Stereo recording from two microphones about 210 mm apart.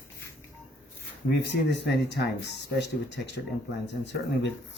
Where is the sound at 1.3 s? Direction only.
55° left (ahead or behind).